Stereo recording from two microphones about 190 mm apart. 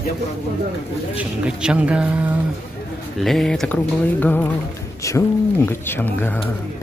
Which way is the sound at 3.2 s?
Centre (ahead or behind).